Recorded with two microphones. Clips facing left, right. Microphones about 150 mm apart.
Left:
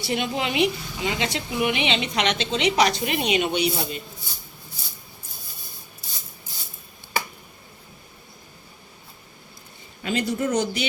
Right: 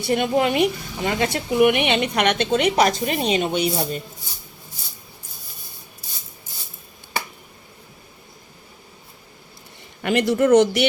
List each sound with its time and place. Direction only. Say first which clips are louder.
0.0 s speech: right 7 dB; 50° right (ahead or behind)
10.0 s speech: right 6 dB; 70° right (ahead or behind)